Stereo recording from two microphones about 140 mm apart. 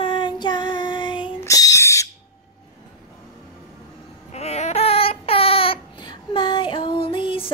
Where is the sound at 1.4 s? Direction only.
25° left (ahead or behind).